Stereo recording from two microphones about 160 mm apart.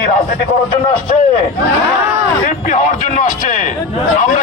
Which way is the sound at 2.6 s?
55° left (ahead or behind).